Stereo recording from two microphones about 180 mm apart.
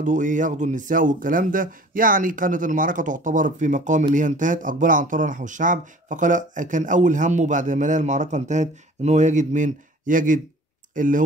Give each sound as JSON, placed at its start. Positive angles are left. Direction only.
{"t": 0.0, "sound": "speech", "side_deg": -45}